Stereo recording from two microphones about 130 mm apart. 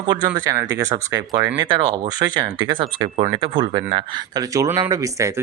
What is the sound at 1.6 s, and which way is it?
Speech, 35° right (ahead or behind).